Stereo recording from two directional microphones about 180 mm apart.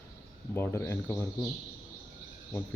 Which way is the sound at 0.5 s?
15° left (ahead or behind).